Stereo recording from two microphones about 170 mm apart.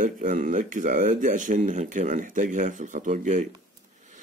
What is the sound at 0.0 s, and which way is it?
Speech, 50° right (ahead or behind).